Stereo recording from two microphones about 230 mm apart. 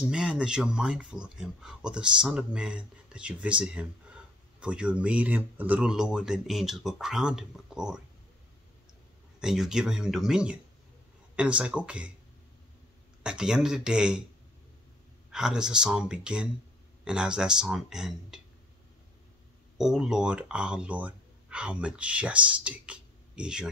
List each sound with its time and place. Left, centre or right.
0.0 s speech: centre
9.4 s speech: centre
13.2 s speech: centre
15.3 s speech: centre
19.8 s speech: centre